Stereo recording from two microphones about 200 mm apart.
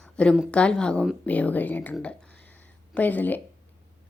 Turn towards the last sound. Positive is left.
turn(degrees=10)  # may be behind; listen again after turning